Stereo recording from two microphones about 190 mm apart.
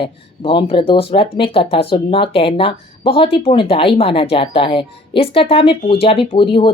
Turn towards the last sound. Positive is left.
turn(degrees=30)  # may be behind; listen again after turning